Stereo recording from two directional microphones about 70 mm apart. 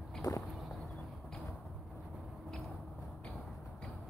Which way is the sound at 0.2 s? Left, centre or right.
Left.